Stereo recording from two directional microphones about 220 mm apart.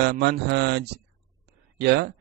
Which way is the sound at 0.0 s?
50° right (ahead or behind).